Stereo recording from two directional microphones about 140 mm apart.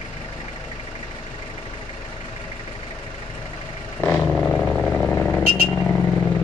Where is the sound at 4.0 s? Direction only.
10° left (ahead or behind).